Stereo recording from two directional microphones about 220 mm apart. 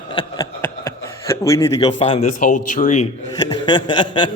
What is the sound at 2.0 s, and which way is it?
A man's voice, 25° left (ahead or behind).